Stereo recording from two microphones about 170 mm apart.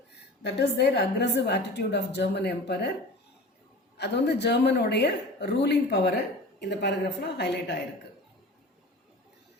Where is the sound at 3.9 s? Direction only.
80° left.